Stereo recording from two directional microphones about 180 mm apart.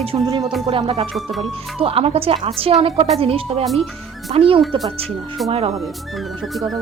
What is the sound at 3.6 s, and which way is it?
Speech, centre (ahead or behind).